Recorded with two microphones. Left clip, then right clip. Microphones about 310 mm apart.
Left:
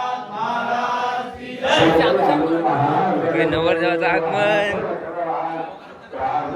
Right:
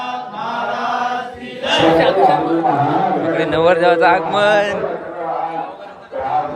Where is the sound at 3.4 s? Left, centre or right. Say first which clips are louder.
Right 7 dB; centre.